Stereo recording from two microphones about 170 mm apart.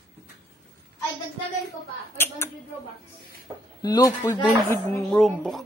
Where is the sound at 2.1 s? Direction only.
15° left (ahead or behind).